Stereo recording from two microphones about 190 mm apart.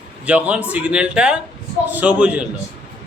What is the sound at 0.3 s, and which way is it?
A man's voice, 5° right (ahead or behind).